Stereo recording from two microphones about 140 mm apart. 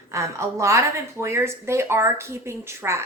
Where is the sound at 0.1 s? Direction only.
20° right (ahead or behind).